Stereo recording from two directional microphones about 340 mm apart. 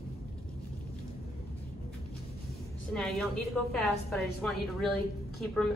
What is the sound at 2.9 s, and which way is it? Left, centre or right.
A woman's voice, centre.